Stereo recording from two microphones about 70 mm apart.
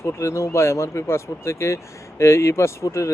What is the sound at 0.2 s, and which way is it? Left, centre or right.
Speech, left.